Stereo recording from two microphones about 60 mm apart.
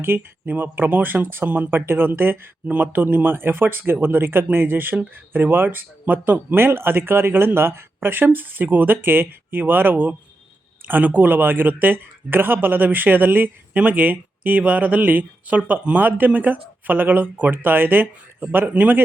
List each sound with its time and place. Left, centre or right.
0.0 s speech: right